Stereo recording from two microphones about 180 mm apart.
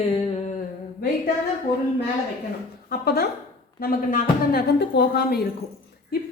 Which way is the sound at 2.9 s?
60° left (ahead or behind).